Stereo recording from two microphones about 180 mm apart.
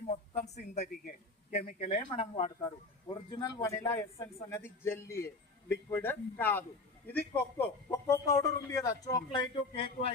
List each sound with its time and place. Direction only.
0.1 s a man's voice: 40° left (ahead or behind)
1.8 s speech: 30° left (ahead or behind)
2.6 s a man's voice: 20° left (ahead or behind)